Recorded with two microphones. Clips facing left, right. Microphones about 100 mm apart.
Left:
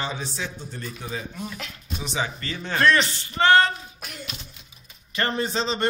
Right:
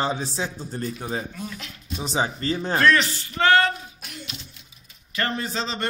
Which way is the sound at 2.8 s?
20° left (ahead or behind).